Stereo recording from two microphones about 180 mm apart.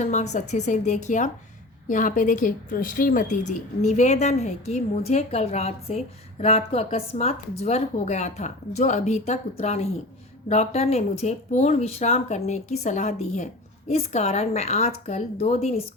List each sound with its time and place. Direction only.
0.0 s speech: 40° left (ahead or behind)